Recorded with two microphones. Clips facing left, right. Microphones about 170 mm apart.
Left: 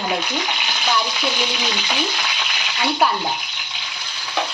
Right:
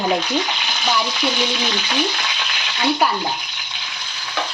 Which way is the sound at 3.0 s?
Centre (ahead or behind).